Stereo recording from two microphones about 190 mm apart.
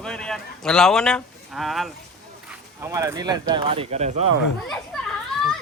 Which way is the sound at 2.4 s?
5° right (ahead or behind).